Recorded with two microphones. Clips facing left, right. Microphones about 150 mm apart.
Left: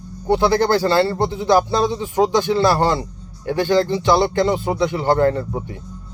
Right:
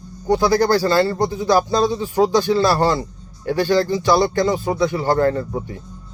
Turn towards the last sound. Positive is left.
turn(degrees=20)  # may be behind; listen again after turning